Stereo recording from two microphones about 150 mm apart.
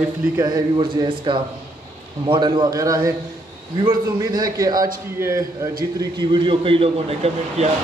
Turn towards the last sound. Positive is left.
turn(degrees=-45)  # may be behind; listen again after turning